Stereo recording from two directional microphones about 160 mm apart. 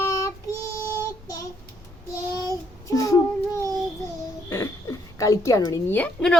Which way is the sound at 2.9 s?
20° left (ahead or behind).